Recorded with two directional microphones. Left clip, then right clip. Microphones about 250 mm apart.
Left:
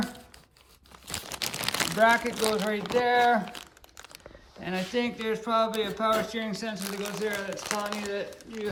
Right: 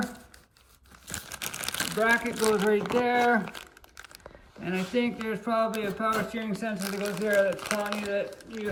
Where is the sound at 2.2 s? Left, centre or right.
Centre.